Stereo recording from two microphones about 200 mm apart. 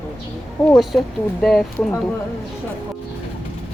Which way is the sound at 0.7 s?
Centre (ahead or behind).